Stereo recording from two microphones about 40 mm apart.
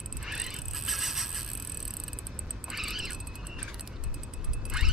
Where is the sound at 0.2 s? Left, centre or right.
Centre.